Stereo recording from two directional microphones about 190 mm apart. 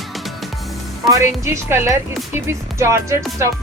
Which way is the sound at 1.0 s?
15° right (ahead or behind).